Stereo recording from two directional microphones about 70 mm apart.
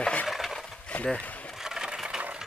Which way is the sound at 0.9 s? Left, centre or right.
Centre.